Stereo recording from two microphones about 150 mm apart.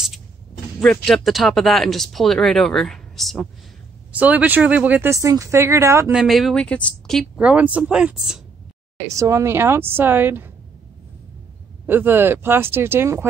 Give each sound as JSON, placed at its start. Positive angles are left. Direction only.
{"t": 0.7, "sound": "speech", "side_deg": 5}
{"t": 4.1, "sound": "speech", "side_deg": -10}
{"t": 6.1, "sound": "speech", "side_deg": 0}
{"t": 7.3, "sound": "speech", "side_deg": -10}
{"t": 8.9, "sound": "speech", "side_deg": -20}
{"t": 11.8, "sound": "speech", "side_deg": -15}